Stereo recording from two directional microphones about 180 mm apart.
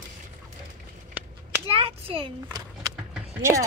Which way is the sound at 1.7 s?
30° right (ahead or behind).